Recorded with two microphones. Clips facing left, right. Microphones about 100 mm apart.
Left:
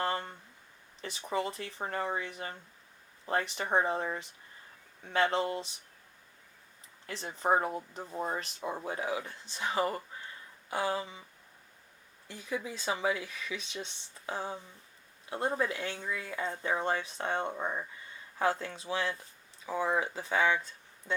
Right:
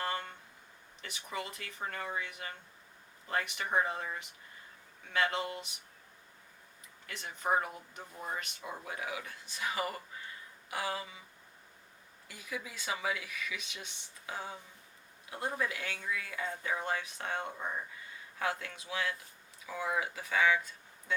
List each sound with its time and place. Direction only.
0.0 s a sound: 30° left (ahead or behind)
1.0 s speech: 30° left (ahead or behind)
7.1 s speech: 30° left (ahead or behind)
12.3 s speech: 30° left (ahead or behind)